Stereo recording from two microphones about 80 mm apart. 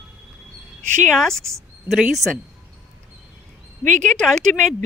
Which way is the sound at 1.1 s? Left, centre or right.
Centre.